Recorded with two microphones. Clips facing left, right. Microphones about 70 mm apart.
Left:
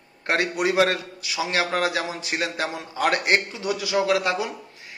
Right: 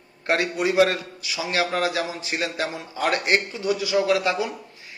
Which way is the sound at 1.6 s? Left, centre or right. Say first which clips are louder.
Even; left.